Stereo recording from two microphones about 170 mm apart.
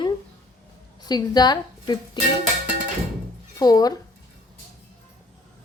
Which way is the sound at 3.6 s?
20° left (ahead or behind).